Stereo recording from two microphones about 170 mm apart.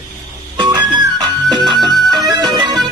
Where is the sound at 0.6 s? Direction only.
25° right (ahead or behind).